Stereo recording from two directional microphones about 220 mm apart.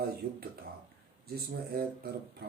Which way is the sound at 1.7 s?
45° right (ahead or behind).